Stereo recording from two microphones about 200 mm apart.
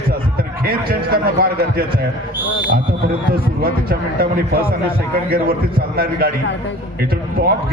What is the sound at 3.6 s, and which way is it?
A man's voice, 50° right (ahead or behind).